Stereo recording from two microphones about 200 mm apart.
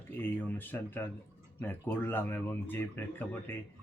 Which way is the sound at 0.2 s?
10° left (ahead or behind).